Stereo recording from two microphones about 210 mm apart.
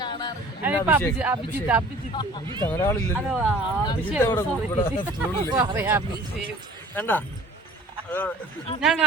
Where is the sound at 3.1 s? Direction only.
5° right (ahead or behind).